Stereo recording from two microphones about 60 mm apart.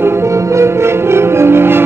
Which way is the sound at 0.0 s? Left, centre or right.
Right.